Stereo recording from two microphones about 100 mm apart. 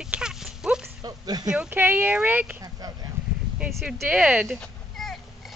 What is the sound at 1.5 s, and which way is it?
Speech, 15° right (ahead or behind).